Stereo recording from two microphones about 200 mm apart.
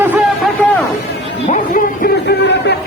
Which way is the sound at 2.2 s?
60° left (ahead or behind).